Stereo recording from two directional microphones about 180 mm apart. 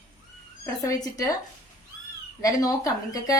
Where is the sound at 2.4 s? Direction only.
20° left (ahead or behind).